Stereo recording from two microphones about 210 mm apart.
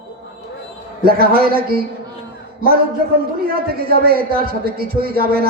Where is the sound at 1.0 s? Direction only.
45° right (ahead or behind).